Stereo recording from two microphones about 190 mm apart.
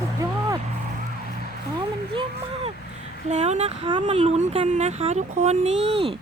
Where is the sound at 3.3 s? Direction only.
35° right (ahead or behind).